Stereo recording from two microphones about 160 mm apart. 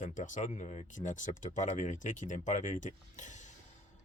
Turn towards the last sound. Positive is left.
turn(degrees=50)  # may be behind; listen again after turning